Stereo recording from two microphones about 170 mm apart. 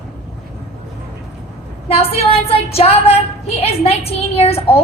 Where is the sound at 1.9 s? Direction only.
35° left (ahead or behind).